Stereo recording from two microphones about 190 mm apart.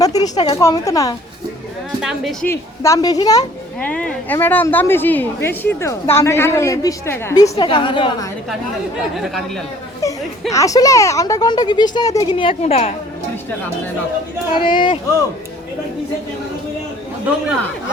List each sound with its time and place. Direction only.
0.0 s speech: 20° left (ahead or behind)
2.0 s speech: 5° right (ahead or behind)
2.5 s speech: 15° left (ahead or behind)
3.8 s a woman's voice: 5° left (ahead or behind)
7.5 s speech: 25° left (ahead or behind)
9.1 s speech: centre (ahead or behind)
10.0 s chatter: 15° left (ahead or behind)
10.5 s speech: 15° left (ahead or behind)
14.5 s speech: 25° left (ahead or behind)